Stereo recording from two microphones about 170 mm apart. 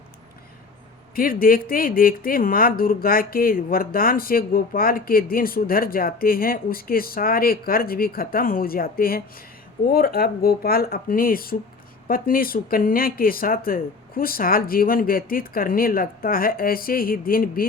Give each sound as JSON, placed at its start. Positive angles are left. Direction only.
{"t": 1.1, "sound": "speech", "side_deg": 55}